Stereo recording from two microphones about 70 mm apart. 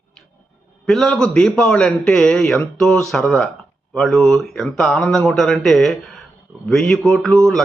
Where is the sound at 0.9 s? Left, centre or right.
Centre.